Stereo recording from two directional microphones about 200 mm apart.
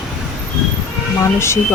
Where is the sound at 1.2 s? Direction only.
15° left (ahead or behind).